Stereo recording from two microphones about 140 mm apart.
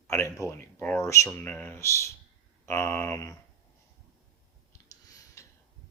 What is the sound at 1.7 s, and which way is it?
Speech, 20° left (ahead or behind).